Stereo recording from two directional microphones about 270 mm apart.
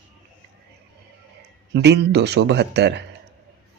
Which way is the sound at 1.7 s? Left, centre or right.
Right.